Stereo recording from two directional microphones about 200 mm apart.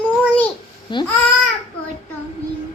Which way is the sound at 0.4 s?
25° left (ahead or behind).